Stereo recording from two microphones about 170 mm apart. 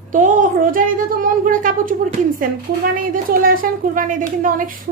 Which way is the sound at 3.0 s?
55° right (ahead or behind).